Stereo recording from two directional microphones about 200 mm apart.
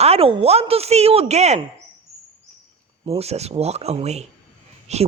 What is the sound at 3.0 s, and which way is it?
A woman's voice, 30° right (ahead or behind).